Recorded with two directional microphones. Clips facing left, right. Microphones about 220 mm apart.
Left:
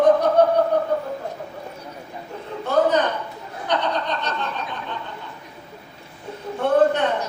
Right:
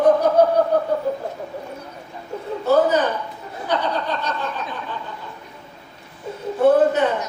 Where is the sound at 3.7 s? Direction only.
5° right (ahead or behind).